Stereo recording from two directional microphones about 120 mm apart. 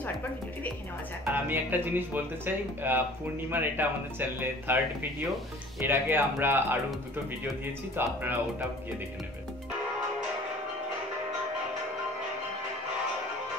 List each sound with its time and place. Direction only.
1.2 s speech: 15° right (ahead or behind)
5.8 s speech: 15° right (ahead or behind)
7.9 s speech: 15° right (ahead or behind)